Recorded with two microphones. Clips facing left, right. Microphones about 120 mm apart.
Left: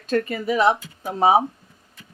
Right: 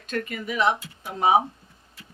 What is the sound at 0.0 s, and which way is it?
Speech, 35° left (ahead or behind).